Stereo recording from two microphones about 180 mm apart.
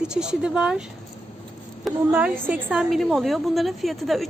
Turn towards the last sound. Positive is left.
turn(degrees=0)  # may be behind; listen again after turning